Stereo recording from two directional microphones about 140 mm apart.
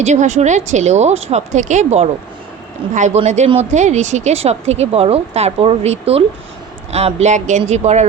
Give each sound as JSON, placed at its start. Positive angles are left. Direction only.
{"t": 0.0, "sound": "speech", "side_deg": -55}